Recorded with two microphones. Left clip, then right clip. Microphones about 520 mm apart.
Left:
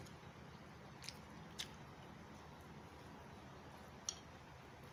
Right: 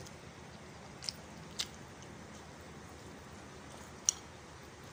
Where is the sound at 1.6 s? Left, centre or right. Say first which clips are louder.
Right 9 dB; left.